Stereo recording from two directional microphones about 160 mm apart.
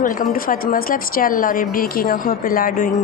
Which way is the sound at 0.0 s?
60° left (ahead or behind).